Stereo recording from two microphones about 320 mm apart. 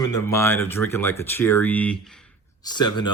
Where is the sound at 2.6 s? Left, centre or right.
Centre.